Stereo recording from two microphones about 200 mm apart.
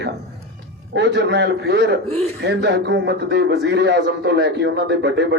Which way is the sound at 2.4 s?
55° right (ahead or behind).